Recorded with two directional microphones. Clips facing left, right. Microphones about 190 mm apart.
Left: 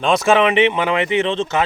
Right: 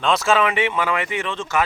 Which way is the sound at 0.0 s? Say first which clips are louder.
Left 4 dB; 15° left (ahead or behind).